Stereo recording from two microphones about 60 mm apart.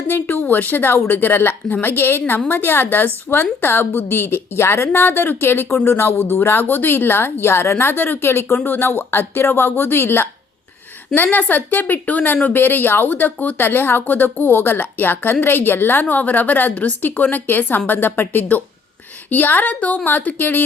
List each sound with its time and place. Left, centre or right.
0.1 s speech: left
8.5 s speech: left